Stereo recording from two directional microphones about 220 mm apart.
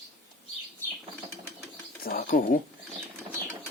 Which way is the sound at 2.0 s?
40° left (ahead or behind).